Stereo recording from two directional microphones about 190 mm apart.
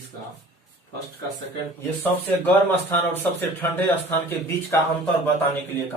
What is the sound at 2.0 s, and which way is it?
A man's voice, 10° left (ahead or behind).